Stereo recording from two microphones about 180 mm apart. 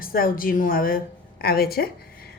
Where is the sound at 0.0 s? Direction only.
55° left (ahead or behind).